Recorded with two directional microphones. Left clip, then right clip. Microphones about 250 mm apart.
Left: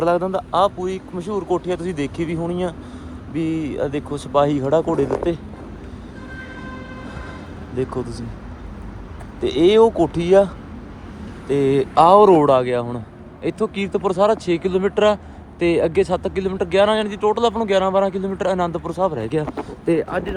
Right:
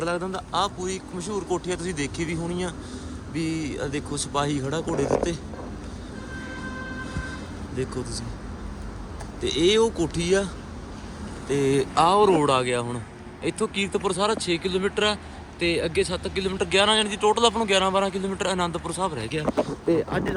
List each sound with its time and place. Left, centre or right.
0.0 s speech: centre
7.8 s speech: centre
9.4 s speech: centre
11.4 s speech: centre
19.9 s speech: left